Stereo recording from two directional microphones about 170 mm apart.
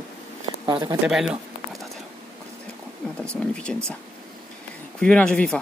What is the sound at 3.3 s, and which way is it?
Speech, 5° left (ahead or behind).